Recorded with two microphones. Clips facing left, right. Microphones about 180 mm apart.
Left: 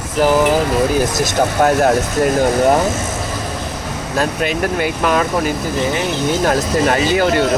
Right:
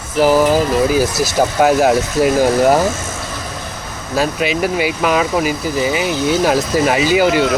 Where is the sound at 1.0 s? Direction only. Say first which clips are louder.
Right 1 dB; 5° right (ahead or behind).